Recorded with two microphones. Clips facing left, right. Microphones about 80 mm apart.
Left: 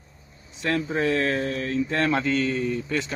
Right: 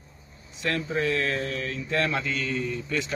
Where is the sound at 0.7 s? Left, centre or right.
Left.